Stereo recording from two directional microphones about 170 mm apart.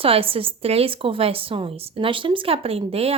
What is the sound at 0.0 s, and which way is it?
Speech, 35° right (ahead or behind).